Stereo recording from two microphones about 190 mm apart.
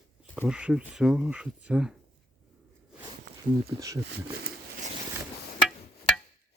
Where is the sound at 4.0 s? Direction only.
65° right (ahead or behind).